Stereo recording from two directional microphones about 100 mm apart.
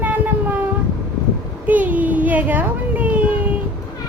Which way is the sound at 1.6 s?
15° right (ahead or behind).